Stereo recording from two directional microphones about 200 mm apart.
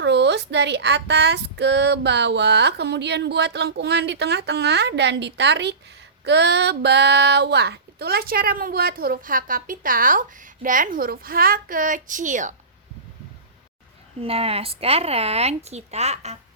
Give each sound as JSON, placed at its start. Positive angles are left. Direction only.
{"t": 0.0, "sound": "speech", "side_deg": -60}
{"t": 6.2, "sound": "a sound", "side_deg": -60}
{"t": 14.2, "sound": "speech", "side_deg": -30}